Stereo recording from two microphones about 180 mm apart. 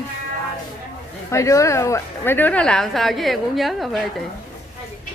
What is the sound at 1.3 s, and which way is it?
A woman's voice, 15° left (ahead or behind).